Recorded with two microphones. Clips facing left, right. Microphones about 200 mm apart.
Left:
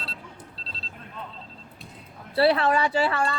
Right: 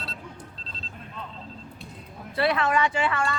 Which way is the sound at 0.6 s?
35° left (ahead or behind).